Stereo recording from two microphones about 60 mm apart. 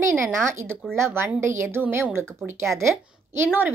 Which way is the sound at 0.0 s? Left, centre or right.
Right.